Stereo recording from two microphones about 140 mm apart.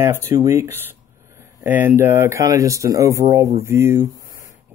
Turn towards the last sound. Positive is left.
turn(degrees=-20)  # may be behind; listen again after turning